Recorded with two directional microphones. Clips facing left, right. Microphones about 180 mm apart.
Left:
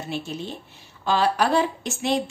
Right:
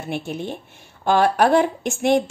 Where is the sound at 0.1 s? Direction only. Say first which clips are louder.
Right 5 dB; 55° right (ahead or behind).